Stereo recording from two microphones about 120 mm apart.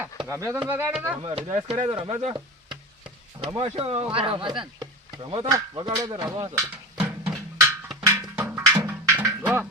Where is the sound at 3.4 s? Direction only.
50° right (ahead or behind).